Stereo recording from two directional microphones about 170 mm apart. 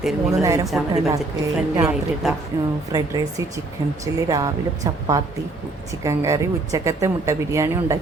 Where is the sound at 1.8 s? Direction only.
5° right (ahead or behind).